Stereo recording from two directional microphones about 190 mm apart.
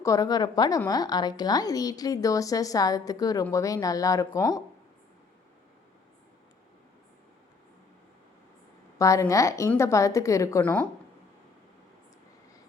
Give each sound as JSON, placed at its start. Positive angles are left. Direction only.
{"t": 0.0, "sound": "a woman's voice", "side_deg": 20}
{"t": 9.0, "sound": "a woman's voice", "side_deg": 15}